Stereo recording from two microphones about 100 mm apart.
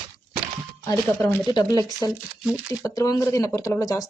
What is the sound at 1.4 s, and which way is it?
Speech, 40° left (ahead or behind).